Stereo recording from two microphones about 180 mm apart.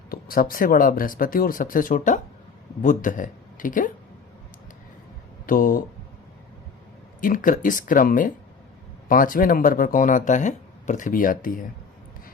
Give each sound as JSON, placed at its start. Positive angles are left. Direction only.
{"t": 0.1, "sound": "speech", "side_deg": 55}
{"t": 5.5, "sound": "speech", "side_deg": 50}
{"t": 7.2, "sound": "speech", "side_deg": 50}